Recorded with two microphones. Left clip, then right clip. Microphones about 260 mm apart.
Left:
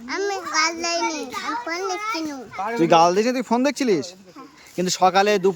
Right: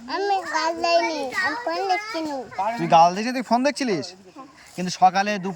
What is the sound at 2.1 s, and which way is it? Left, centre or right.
Speech, centre.